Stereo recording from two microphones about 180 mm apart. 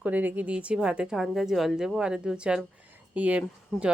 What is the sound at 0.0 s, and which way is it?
Speech, 10° right (ahead or behind).